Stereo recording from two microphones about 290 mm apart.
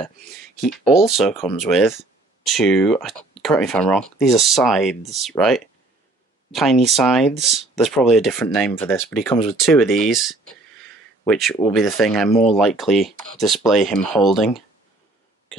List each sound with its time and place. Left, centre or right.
0.6 s speech: centre
9.3 s speech: centre
9.6 s speech: centre